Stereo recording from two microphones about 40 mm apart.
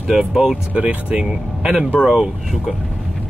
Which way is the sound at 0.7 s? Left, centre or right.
Right.